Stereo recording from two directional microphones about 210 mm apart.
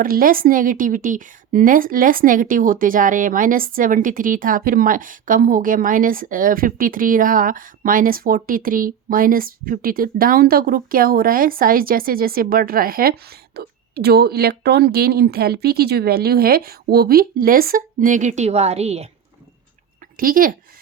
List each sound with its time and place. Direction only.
0.0 s a woman's voice: 45° right (ahead or behind)
20.1 s a woman's voice: 40° right (ahead or behind)